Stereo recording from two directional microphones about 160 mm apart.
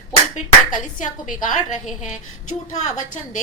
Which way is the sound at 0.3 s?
50° left (ahead or behind).